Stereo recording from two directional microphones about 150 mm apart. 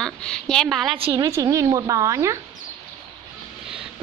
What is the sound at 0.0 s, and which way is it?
Speech, 5° left (ahead or behind).